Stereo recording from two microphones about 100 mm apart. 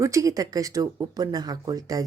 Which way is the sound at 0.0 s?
30° right (ahead or behind).